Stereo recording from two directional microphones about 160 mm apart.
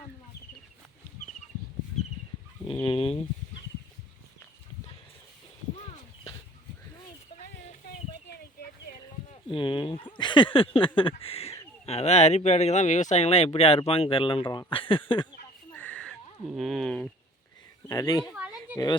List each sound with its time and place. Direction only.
2.8 s speech: 35° left (ahead or behind)
9.5 s speech: 30° left (ahead or behind)
15.7 s a sound: 10° left (ahead or behind)
16.5 s speech: centre (ahead or behind)
17.8 s speech: 25° left (ahead or behind)
18.3 s a sound: 10° right (ahead or behind)